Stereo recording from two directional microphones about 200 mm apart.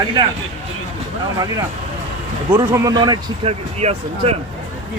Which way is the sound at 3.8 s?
30° right (ahead or behind).